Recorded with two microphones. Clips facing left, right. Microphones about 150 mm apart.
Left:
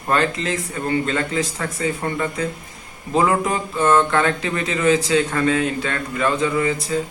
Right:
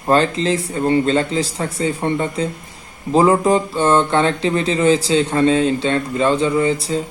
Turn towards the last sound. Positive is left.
turn(degrees=-30)  # may be behind; listen again after turning